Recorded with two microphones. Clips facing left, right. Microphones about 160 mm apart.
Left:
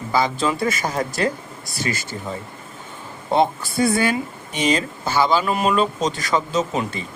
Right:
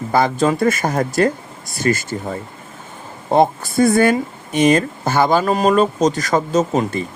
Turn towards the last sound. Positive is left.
turn(degrees=-45)  # may be behind; listen again after turning